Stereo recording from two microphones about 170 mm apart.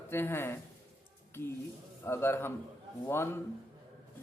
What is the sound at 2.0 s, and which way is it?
A man's voice, 15° left (ahead or behind).